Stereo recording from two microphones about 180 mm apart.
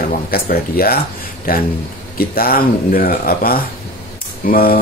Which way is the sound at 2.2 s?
55° left (ahead or behind).